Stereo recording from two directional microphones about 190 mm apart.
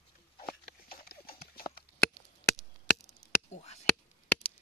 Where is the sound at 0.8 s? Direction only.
55° left (ahead or behind).